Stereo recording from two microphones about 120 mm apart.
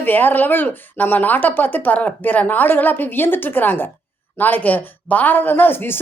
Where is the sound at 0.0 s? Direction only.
15° left (ahead or behind).